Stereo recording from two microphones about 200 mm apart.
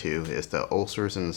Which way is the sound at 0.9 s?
10° left (ahead or behind).